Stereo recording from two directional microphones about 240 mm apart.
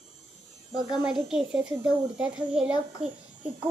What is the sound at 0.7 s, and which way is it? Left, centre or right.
A woman's voice, centre.